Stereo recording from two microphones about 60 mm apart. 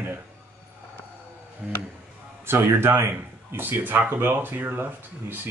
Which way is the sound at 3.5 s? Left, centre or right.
Right.